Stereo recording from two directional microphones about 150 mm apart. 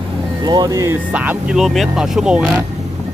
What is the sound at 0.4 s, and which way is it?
Speech, 25° right (ahead or behind).